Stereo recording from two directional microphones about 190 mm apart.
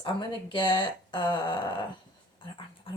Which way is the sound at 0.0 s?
25° left (ahead or behind).